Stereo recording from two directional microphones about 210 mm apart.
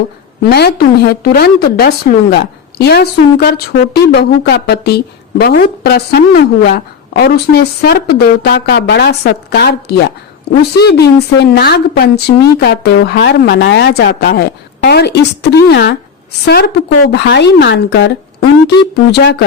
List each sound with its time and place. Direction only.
0.4 s a woman's voice: 50° left (ahead or behind)